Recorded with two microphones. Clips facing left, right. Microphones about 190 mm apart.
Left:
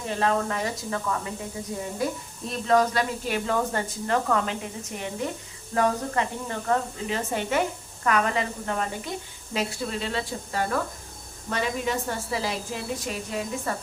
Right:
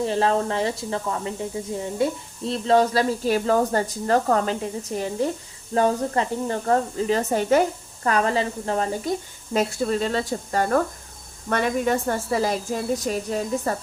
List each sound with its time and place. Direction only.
0.0 s a woman's voice: 30° right (ahead or behind)